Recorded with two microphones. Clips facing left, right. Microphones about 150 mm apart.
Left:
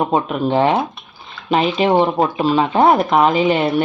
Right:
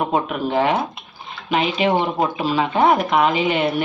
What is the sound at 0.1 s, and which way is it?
Speech, 30° left (ahead or behind).